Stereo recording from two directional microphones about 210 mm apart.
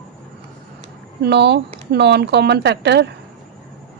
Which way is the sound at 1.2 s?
50° right (ahead or behind).